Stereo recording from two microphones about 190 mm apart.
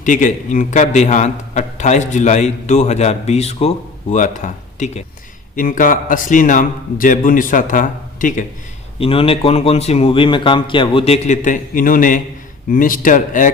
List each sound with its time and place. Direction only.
0.0 s a man's voice: 40° left (ahead or behind)
9.0 s a man's voice: 30° left (ahead or behind)